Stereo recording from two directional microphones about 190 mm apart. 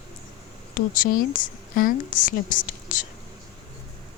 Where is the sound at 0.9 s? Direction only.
45° left (ahead or behind).